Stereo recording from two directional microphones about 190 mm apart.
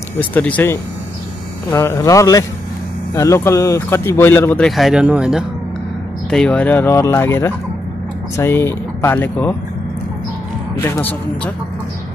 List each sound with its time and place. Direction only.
0.2 s speech: 10° left (ahead or behind)
6.3 s speech: 5° left (ahead or behind)
10.8 s speech: 10° left (ahead or behind)